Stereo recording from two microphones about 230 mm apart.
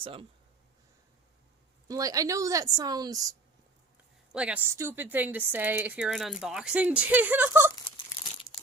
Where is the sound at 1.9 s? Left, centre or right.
Centre.